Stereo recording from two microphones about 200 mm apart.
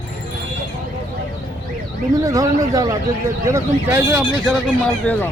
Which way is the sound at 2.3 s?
15° right (ahead or behind).